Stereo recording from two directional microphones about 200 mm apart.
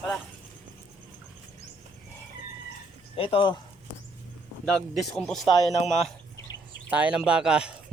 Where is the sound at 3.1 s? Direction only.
25° left (ahead or behind).